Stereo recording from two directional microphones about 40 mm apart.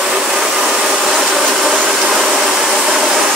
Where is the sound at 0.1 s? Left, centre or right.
Centre.